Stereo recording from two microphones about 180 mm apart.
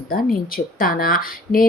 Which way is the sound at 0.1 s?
55° left (ahead or behind).